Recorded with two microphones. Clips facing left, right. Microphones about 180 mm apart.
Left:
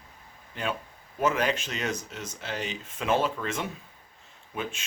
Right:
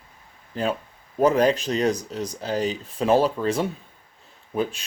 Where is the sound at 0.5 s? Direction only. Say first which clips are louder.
Right 7 dB; 35° right (ahead or behind).